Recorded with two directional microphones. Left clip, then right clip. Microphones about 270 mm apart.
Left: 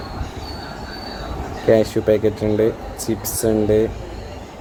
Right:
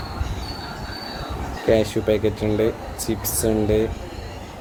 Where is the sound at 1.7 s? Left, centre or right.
Left.